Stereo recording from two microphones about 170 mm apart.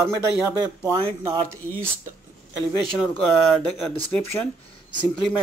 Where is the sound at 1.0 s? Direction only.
30° right (ahead or behind).